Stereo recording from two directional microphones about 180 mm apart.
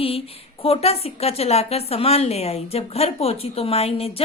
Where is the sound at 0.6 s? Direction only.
35° left (ahead or behind).